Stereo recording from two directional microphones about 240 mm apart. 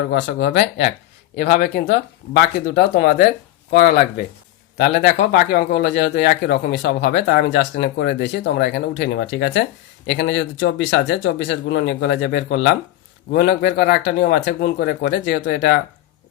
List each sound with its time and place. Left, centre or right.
0.0 s a man's voice: left